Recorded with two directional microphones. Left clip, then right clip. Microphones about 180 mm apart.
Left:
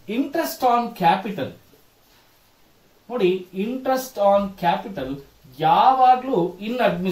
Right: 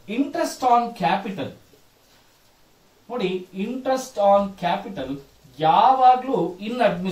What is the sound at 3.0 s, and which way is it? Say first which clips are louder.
Speech: left 5 dB; 10° left (ahead or behind).